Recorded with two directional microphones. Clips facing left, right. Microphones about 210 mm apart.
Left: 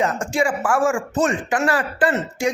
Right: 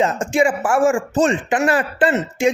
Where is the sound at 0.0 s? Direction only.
20° right (ahead or behind).